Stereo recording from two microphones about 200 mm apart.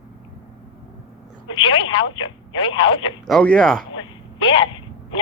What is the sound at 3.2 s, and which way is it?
Speech, 5° left (ahead or behind).